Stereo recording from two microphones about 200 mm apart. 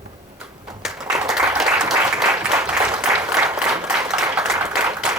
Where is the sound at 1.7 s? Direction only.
15° right (ahead or behind).